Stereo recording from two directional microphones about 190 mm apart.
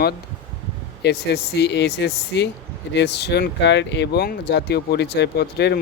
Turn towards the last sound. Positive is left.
turn(degrees=60)  # may be behind; listen again after turning